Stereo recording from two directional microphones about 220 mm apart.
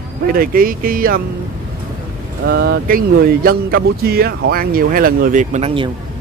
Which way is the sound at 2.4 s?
50° right (ahead or behind).